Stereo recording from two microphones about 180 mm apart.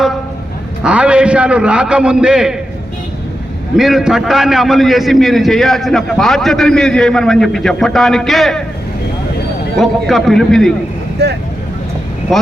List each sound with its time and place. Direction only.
0.8 s a man's voice: 5° right (ahead or behind)
3.8 s a man's voice: centre (ahead or behind)
9.7 s a man's voice: centre (ahead or behind)
11.2 s speech: 65° right (ahead or behind)
12.3 s a man's voice: centre (ahead or behind)